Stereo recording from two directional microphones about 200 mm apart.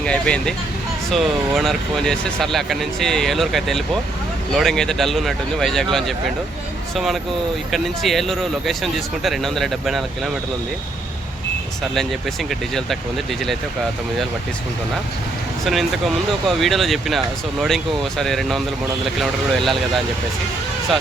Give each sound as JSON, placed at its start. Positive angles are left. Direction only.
{"t": 0.0, "sound": "vehicle", "side_deg": 5}
{"t": 1.1, "sound": "speech", "side_deg": 0}
{"t": 11.9, "sound": "speech", "side_deg": 0}
{"t": 15.6, "sound": "speech", "side_deg": 0}